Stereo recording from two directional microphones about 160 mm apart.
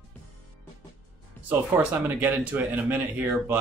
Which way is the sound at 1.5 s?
10° right (ahead or behind).